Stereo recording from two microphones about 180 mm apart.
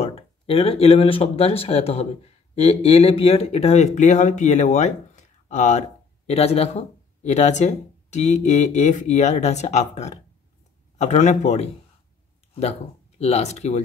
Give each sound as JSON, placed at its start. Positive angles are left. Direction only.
{"t": 0.0, "sound": "speech", "side_deg": 35}
{"t": 13.2, "sound": "speech", "side_deg": 35}